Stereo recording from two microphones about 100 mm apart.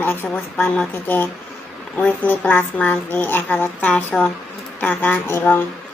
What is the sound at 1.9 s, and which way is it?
Speech, 15° left (ahead or behind).